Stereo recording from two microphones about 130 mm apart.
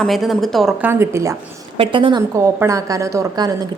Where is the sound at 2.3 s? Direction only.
25° right (ahead or behind).